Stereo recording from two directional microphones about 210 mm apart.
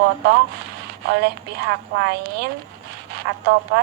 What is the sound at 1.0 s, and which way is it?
A woman's voice, 50° right (ahead or behind).